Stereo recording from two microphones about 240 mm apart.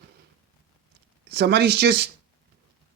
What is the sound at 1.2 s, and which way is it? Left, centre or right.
Speech, right.